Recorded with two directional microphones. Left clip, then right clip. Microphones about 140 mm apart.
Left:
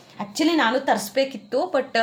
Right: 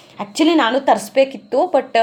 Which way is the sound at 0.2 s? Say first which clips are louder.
Right 6 dB; 35° right (ahead or behind).